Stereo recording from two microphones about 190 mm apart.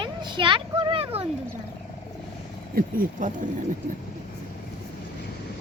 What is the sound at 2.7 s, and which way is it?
Speech, 45° right (ahead or behind).